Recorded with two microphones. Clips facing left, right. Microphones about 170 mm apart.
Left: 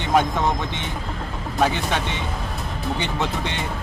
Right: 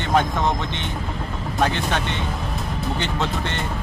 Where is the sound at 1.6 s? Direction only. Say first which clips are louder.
Left 1 dB; 10° left (ahead or behind).